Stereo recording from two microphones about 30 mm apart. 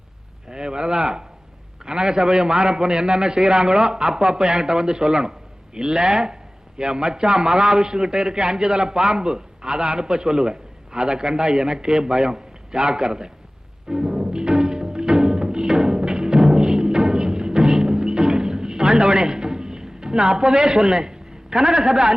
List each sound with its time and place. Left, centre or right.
0.5 s a man's voice: right
13.8 s music: centre